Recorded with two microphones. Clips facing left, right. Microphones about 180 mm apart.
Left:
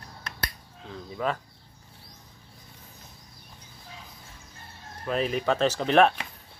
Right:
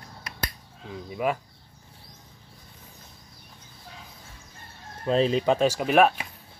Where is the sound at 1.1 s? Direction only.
15° right (ahead or behind).